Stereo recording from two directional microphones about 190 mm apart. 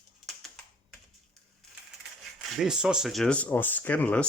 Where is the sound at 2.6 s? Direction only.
5° right (ahead or behind).